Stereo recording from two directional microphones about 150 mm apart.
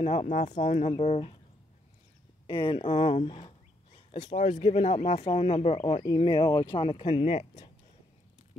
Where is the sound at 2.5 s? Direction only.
35° left (ahead or behind).